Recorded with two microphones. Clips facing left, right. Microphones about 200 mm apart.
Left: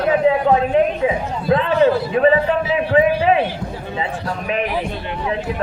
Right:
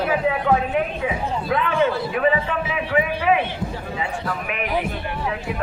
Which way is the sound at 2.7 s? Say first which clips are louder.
Left 7 dB; 35° left (ahead or behind).